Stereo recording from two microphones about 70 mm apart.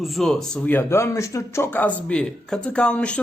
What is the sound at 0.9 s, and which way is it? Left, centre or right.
Speech, left.